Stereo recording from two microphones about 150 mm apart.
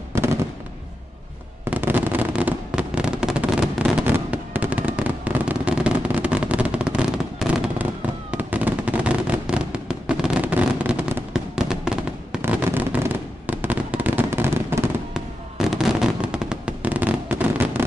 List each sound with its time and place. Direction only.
0.1 s fireworks: 15° right (ahead or behind)
1.6 s fireworks: 15° right (ahead or behind)
15.1 s fireworks: centre (ahead or behind)